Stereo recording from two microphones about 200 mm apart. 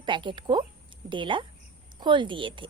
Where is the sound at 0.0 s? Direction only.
25° right (ahead or behind).